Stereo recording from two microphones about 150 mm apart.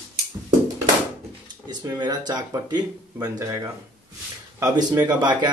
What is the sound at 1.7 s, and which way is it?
Speech, 30° right (ahead or behind).